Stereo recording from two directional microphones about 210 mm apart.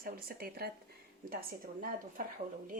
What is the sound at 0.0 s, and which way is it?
Speech, 45° right (ahead or behind).